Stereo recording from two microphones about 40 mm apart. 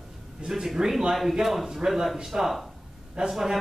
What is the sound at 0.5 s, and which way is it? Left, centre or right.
Speech, centre.